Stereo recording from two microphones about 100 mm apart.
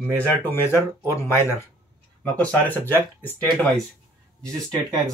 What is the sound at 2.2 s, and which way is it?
Speech, 15° left (ahead or behind).